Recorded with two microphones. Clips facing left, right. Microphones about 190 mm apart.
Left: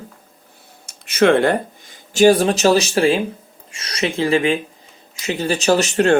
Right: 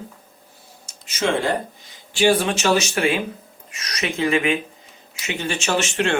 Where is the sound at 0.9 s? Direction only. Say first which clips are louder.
Left 8 dB; 60° left (ahead or behind).